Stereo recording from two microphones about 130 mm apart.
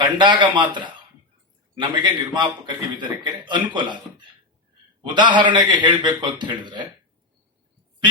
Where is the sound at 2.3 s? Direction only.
35° right (ahead or behind).